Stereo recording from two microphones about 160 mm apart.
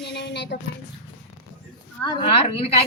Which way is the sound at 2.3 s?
35° left (ahead or behind).